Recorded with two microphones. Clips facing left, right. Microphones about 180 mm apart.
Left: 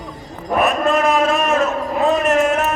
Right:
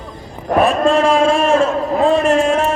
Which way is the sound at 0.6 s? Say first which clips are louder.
Right 4 dB; 30° right (ahead or behind).